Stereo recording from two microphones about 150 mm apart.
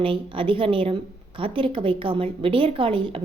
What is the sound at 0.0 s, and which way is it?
A woman's voice, 35° right (ahead or behind).